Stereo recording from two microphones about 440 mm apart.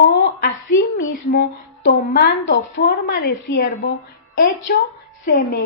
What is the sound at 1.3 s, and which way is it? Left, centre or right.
A woman's voice, left.